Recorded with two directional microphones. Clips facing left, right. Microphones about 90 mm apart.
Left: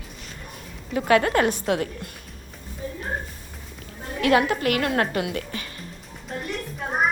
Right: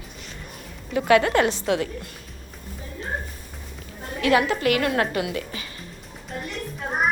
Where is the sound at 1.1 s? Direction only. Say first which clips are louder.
Right 1 dB; 35° left (ahead or behind).